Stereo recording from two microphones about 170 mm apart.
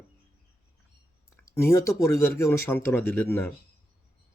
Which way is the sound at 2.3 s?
15° left (ahead or behind).